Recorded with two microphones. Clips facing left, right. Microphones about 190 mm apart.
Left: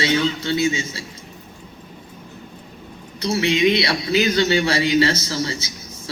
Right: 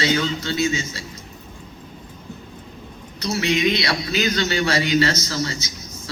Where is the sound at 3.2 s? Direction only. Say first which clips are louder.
Left 3 dB; 25° left (ahead or behind).